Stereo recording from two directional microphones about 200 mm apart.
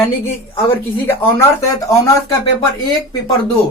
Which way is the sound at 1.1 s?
15° left (ahead or behind).